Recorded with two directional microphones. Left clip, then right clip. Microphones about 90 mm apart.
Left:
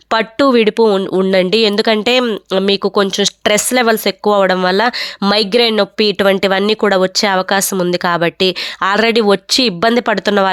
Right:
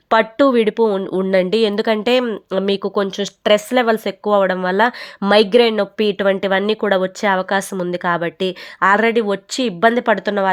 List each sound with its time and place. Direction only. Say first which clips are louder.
0.1 s speech: left 1 dB; 30° left (ahead or behind); by 5.7 s 15° left (ahead or behind)
5.7 s speech: left 5 dB; 25° left (ahead or behind)
8.8 s speech: left 1 dB; 40° left (ahead or behind)